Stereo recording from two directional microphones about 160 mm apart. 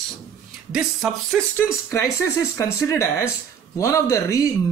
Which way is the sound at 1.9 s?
15° left (ahead or behind).